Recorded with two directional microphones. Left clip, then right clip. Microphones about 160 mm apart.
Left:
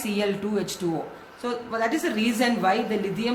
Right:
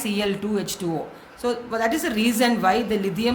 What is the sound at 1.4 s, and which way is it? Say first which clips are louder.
A woman's voice: right 3 dB; 35° right (ahead or behind).